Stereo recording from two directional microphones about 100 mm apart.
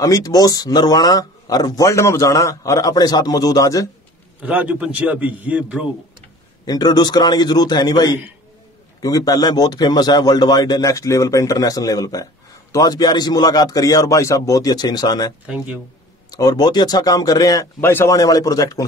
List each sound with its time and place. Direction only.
0.0 s speech: 35° left (ahead or behind)
4.4 s a man's voice: 15° right (ahead or behind)
6.6 s a man's voice: 40° left (ahead or behind)
15.4 s a man's voice: 10° right (ahead or behind)
16.3 s speech: 40° left (ahead or behind)
17.7 s speech: 25° left (ahead or behind)
18.1 s speech: 40° left (ahead or behind)